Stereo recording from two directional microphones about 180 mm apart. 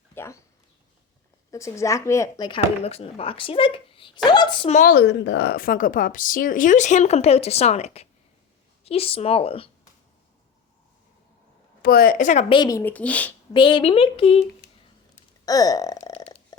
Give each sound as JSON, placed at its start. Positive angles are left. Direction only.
{"t": 0.1, "sound": "a sound", "side_deg": 15}
{"t": 1.5, "sound": "speech", "side_deg": 15}
{"t": 4.7, "sound": "a woman's voice", "side_deg": 45}
{"t": 4.9, "sound": "a woman's voice", "side_deg": 85}
{"t": 11.8, "sound": "a woman's voice", "side_deg": 55}
{"t": 12.5, "sound": "speech", "side_deg": 20}
{"t": 13.5, "sound": "speech", "side_deg": 25}
{"t": 15.4, "sound": "burping", "side_deg": 20}